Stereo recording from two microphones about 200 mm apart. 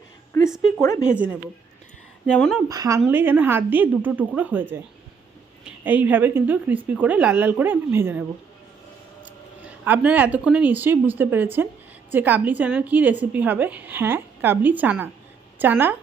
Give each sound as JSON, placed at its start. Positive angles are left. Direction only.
{"t": 0.3, "sound": "a sound", "side_deg": 15}
{"t": 0.8, "sound": "speech", "side_deg": 15}
{"t": 2.2, "sound": "speech", "side_deg": 0}
{"t": 2.6, "sound": "a woman's voice", "side_deg": -15}
{"t": 9.2, "sound": "a woman's voice", "side_deg": -5}